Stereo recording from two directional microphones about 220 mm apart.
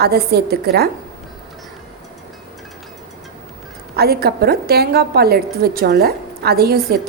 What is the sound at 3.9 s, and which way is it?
A woman's voice, 45° right (ahead or behind).